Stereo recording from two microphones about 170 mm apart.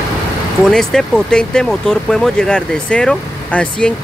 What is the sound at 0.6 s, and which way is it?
Speech, centre (ahead or behind).